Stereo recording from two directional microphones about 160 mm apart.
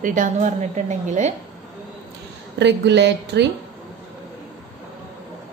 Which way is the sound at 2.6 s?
90° right.